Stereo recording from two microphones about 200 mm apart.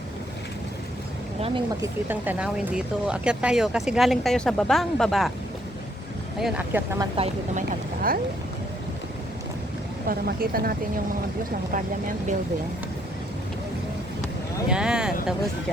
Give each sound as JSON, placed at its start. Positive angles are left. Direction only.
{"t": 1.4, "sound": "speech", "side_deg": -30}
{"t": 1.8, "sound": "speech", "side_deg": -10}
{"t": 6.4, "sound": "speech", "side_deg": -5}
{"t": 7.2, "sound": "speech", "side_deg": -40}
{"t": 10.1, "sound": "a woman's voice", "side_deg": -45}
{"t": 14.7, "sound": "speech", "side_deg": -5}